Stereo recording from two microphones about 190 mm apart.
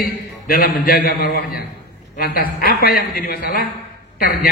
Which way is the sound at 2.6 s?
50° left (ahead or behind).